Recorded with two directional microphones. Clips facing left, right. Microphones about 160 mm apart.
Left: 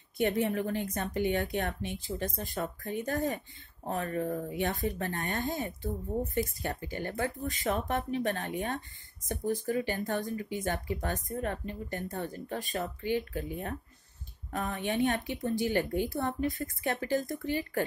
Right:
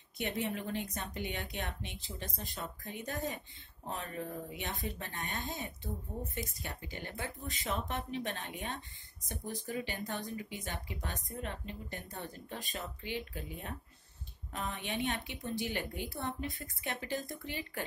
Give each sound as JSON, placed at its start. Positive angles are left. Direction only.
{"t": 0.2, "sound": "speech", "side_deg": 45}